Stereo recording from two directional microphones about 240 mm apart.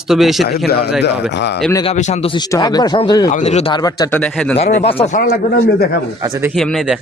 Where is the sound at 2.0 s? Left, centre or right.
Left.